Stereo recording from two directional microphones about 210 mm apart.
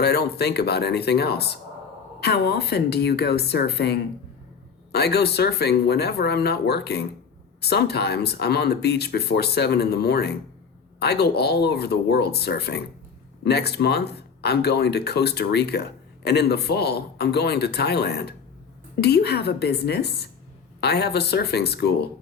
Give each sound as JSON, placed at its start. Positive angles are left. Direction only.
{"t": 0.0, "sound": "speech", "side_deg": 50}